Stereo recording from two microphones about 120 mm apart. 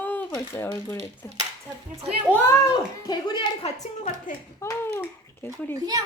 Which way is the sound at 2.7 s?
35° left (ahead or behind).